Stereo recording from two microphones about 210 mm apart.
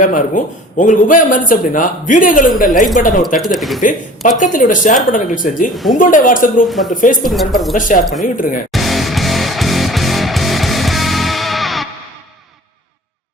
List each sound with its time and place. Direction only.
0.0 s speech: 40° left (ahead or behind)
3.3 s speech: centre (ahead or behind)
3.8 s speech: 35° left (ahead or behind)
6.7 s speech: centre (ahead or behind)
6.9 s speech: 40° left (ahead or behind)
7.3 s speech: centre (ahead or behind)
7.8 s speech: 40° left (ahead or behind)
8.7 s music: centre (ahead or behind)